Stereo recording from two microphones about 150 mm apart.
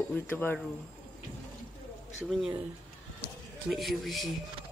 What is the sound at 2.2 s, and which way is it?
Speech, centre (ahead or behind).